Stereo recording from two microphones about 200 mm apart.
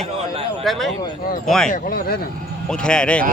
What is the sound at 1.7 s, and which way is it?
Speech, 45° left (ahead or behind).